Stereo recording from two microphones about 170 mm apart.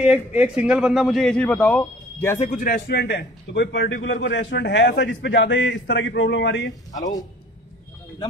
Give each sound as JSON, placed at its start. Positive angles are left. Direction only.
{"t": 0.0, "sound": "a man's voice", "side_deg": -10}
{"t": 2.5, "sound": "speech", "side_deg": 55}
{"t": 2.9, "sound": "a man's voice", "side_deg": 75}